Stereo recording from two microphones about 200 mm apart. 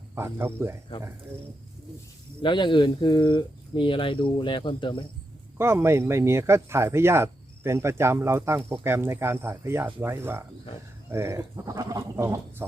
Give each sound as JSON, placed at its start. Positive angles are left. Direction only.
{"t": 0.2, "sound": "speech", "side_deg": -10}
{"t": 2.4, "sound": "speech", "side_deg": 25}
{"t": 5.5, "sound": "speech", "side_deg": -10}